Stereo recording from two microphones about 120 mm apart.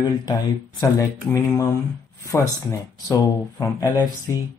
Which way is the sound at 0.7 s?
25° left (ahead or behind).